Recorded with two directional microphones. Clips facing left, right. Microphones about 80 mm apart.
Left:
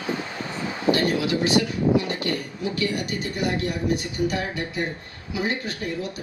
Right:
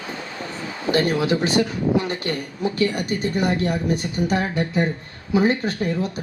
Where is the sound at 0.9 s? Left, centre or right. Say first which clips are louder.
Right 6 dB; right.